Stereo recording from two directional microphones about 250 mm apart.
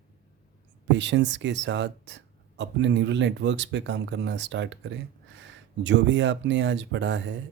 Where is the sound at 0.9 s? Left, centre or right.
Right.